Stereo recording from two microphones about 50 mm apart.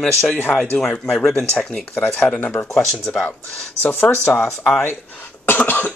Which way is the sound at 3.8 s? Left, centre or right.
Left.